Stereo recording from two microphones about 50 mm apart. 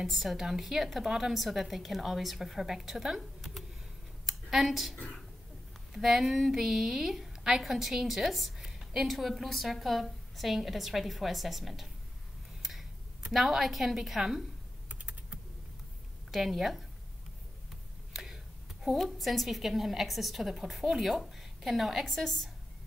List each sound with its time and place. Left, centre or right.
0.0 s a woman's voice: centre
5.9 s a woman's voice: centre
8.6 s a sound: centre
9.0 s a woman's voice: centre
13.3 s a woman's voice: centre
14.9 s typing: right
16.3 s speech: centre
18.1 s a sound: centre
18.9 s a woman's voice: centre
22.0 s a woman's voice: centre